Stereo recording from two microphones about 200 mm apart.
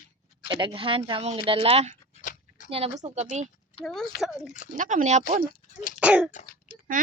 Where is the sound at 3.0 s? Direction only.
35° right (ahead or behind).